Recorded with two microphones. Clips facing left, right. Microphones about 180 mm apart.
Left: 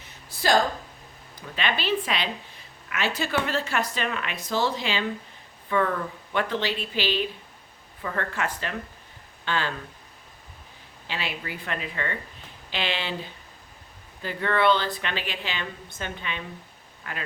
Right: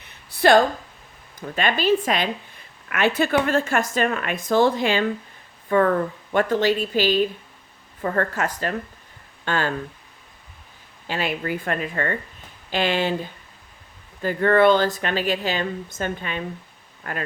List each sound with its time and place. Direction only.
0.0 s a sound: 60° right (ahead or behind)
1.4 s a woman's voice: 45° right (ahead or behind)
11.0 s speech: 45° right (ahead or behind)
14.2 s speech: 45° right (ahead or behind)